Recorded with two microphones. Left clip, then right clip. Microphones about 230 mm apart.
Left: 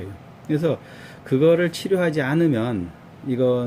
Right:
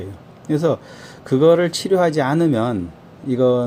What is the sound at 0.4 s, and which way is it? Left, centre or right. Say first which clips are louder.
Speech: right 4 dB; centre.